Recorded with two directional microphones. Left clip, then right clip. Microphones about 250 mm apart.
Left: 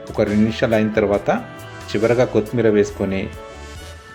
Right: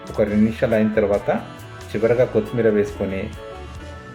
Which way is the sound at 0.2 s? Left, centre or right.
Left.